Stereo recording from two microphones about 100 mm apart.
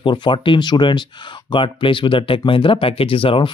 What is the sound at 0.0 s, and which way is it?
Speech, 50° left (ahead or behind).